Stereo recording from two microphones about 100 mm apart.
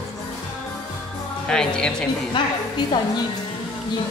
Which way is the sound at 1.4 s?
10° left (ahead or behind).